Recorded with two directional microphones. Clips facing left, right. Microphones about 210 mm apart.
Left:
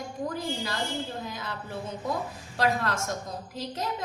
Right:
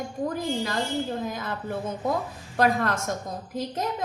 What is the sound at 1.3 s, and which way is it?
A woman's voice, 50° right (ahead or behind).